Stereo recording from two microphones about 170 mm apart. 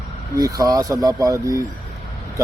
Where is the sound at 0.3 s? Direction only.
20° right (ahead or behind).